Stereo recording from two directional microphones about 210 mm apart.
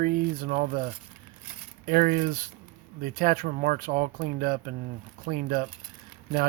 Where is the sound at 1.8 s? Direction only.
45° right (ahead or behind).